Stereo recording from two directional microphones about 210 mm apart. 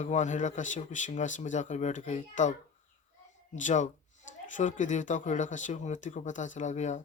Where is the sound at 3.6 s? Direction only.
35° left (ahead or behind).